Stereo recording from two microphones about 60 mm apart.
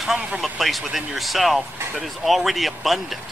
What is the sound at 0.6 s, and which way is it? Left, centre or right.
Speech, centre.